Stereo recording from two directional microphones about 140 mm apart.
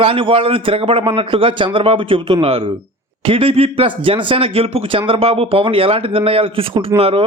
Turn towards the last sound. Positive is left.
turn(degrees=-45)  # may be behind; listen again after turning